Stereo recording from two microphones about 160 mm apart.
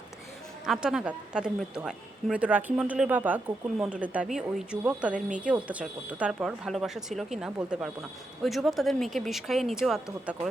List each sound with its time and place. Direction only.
0.6 s a woman's voice: 5° right (ahead or behind)